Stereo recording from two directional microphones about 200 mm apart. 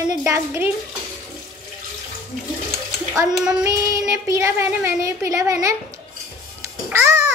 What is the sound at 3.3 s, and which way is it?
Child singing, 5° right (ahead or behind).